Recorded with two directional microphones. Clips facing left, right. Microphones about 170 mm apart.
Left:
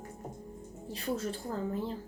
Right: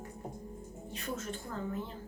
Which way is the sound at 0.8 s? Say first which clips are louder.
Left 5 dB; 35° left (ahead or behind).